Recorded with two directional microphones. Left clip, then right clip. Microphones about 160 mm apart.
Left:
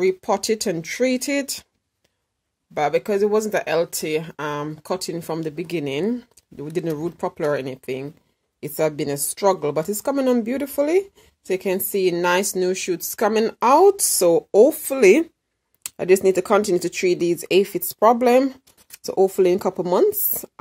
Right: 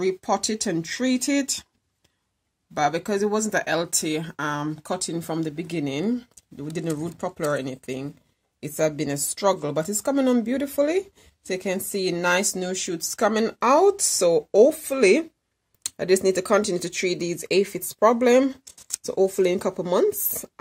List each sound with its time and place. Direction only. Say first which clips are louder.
0.0 s speech: left 3 dB; 35° left (ahead or behind)
2.7 s a woman's voice: left 3 dB; 20° left (ahead or behind); by 15.2 s 35° left (ahead or behind)
15.8 s a woman's voice: left 4 dB; 20° left (ahead or behind)